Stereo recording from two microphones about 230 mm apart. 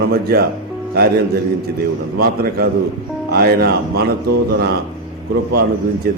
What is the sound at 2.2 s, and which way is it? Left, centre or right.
A man's voice, right.